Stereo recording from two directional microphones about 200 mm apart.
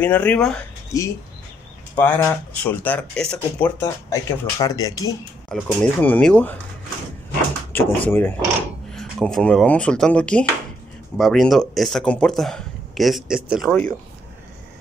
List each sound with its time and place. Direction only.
0.0 s speech: 10° left (ahead or behind)
0.9 s speech: 15° left (ahead or behind)
4.1 s speech: 15° left (ahead or behind)
5.5 s speech: 5° left (ahead or behind)
7.7 s speech: 10° left (ahead or behind)